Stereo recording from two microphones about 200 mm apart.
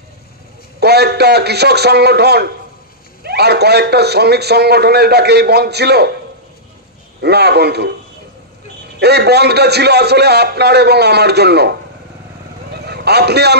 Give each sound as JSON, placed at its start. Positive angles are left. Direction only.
{"t": 0.7, "sound": "a man's voice", "side_deg": -55}
{"t": 7.2, "sound": "a man's voice", "side_deg": -55}
{"t": 9.0, "sound": "a man's voice", "side_deg": -55}
{"t": 12.7, "sound": "a sound", "side_deg": -55}